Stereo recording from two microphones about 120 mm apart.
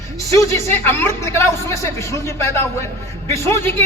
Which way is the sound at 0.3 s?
25° left (ahead or behind).